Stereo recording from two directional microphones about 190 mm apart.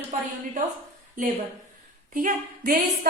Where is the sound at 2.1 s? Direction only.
45° right (ahead or behind).